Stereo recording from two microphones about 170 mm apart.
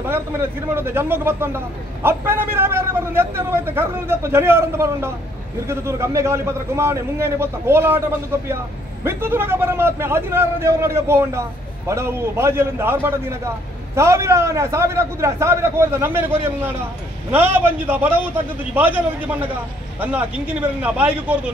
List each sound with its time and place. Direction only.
0.1 s a man's voice: 15° right (ahead or behind)
9.0 s a man's voice: 15° right (ahead or behind)